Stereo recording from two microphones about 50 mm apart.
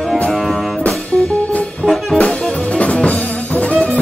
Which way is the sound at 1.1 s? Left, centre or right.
Centre.